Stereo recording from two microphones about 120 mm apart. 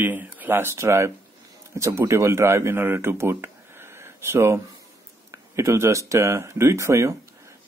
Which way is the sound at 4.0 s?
20° right (ahead or behind).